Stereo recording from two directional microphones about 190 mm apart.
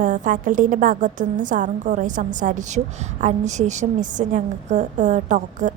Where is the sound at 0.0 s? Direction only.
45° right (ahead or behind).